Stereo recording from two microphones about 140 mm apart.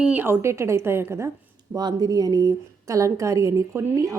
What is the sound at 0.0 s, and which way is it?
A woman's voice, 10° right (ahead or behind).